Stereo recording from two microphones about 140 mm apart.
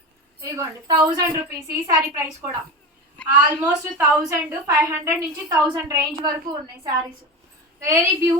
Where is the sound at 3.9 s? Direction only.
10° right (ahead or behind).